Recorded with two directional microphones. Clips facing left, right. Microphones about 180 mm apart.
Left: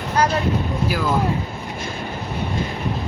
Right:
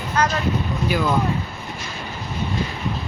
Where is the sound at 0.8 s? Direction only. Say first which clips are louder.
Right 2 dB; 5° left (ahead or behind).